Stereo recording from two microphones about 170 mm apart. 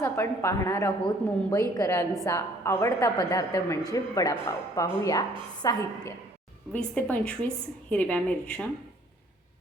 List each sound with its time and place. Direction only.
0.0 s a woman's voice: 15° left (ahead or behind)
6.7 s a woman's voice: 10° left (ahead or behind)